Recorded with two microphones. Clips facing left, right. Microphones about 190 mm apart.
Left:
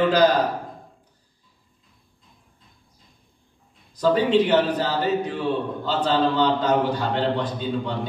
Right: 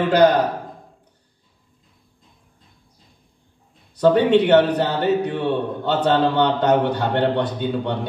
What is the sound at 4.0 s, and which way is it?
Speech, 65° right (ahead or behind).